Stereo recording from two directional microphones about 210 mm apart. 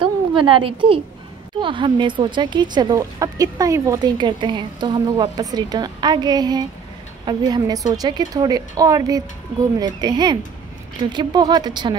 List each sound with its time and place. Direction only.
0.0 s a woman's voice: 25° right (ahead or behind)